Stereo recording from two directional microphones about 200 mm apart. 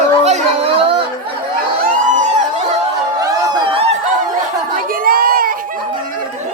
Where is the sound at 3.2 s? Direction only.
15° right (ahead or behind).